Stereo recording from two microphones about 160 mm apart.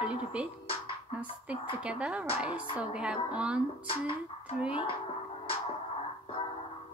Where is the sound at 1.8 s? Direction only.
5° right (ahead or behind).